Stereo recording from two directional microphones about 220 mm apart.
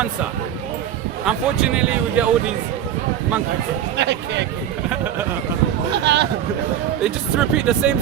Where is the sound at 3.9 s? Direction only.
50° right (ahead or behind).